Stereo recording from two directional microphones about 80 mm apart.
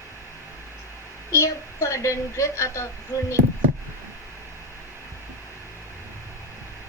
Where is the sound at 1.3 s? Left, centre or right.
Left.